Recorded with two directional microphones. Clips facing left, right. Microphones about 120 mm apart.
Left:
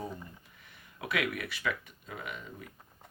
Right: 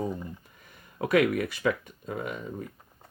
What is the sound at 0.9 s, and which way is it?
Speech, 40° right (ahead or behind).